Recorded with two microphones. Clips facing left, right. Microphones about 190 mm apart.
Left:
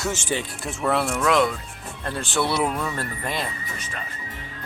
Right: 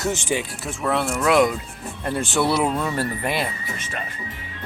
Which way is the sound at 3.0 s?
10° right (ahead or behind).